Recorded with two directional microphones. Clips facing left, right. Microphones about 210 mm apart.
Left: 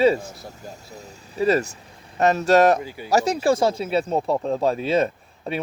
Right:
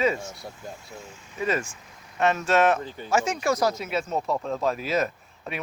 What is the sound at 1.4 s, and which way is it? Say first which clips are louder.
Speech: left 7 dB; 35° left (ahead or behind).